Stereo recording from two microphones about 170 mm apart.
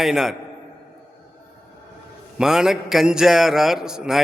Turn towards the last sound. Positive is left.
turn(degrees=-5)  # may be behind; listen again after turning